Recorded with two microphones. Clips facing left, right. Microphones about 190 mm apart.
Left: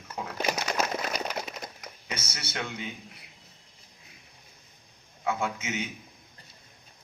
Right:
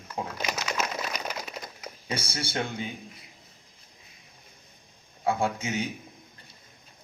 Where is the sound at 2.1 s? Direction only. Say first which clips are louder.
Right 6 dB; 30° right (ahead or behind).